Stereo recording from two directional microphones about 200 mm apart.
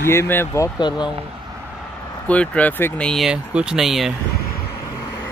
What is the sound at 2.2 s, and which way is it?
Speech, 5° left (ahead or behind).